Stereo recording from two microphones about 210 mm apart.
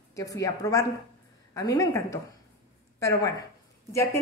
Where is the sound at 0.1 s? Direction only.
15° left (ahead or behind).